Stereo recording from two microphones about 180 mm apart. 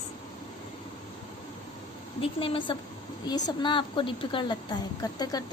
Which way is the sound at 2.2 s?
30° left (ahead or behind).